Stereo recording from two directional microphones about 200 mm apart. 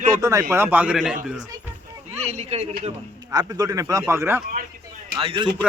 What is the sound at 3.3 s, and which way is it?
Speech, 20° right (ahead or behind).